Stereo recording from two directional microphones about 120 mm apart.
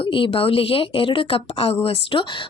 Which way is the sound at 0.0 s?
45° left (ahead or behind).